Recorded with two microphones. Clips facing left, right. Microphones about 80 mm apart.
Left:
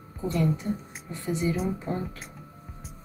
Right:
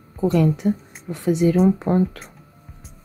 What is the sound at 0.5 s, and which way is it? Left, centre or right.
Speech, right.